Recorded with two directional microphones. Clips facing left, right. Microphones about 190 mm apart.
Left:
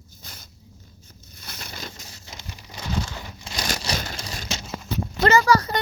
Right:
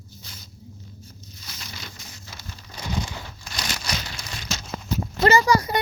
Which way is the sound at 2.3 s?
20° left (ahead or behind).